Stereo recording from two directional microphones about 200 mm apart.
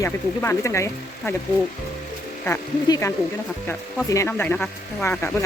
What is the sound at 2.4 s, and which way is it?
Speech, 10° left (ahead or behind).